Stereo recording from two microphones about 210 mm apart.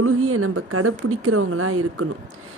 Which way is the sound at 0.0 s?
90° right.